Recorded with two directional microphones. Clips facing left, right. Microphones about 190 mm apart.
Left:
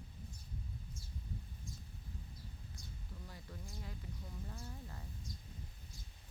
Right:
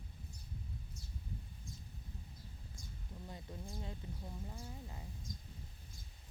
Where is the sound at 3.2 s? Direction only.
20° right (ahead or behind).